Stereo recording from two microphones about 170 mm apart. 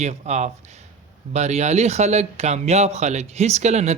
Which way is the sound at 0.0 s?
40° right (ahead or behind).